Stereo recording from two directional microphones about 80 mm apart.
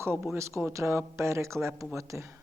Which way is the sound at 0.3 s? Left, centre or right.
Right.